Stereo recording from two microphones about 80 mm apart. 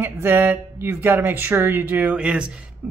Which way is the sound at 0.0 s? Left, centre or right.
Right.